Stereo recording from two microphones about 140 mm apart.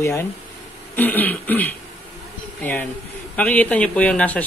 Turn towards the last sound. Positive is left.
turn(degrees=10)  # may be behind; listen again after turning